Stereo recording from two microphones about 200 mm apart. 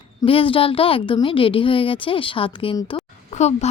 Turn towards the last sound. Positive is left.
turn(degrees=35)  # may be behind; listen again after turning